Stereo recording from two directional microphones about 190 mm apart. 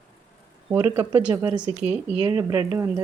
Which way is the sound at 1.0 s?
10° right (ahead or behind).